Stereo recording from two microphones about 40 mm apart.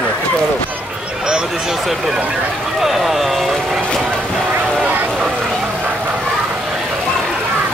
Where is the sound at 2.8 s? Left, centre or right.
Centre.